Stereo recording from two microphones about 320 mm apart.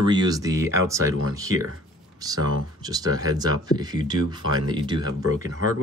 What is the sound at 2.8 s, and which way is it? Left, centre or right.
Speech, centre.